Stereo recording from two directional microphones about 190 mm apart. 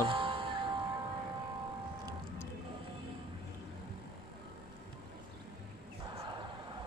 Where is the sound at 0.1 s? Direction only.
25° right (ahead or behind).